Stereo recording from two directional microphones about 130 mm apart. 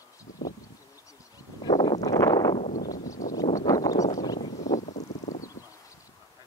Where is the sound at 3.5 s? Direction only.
25° left (ahead or behind).